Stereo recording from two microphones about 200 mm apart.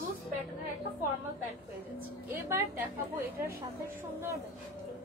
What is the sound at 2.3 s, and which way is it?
Speech, 10° right (ahead or behind).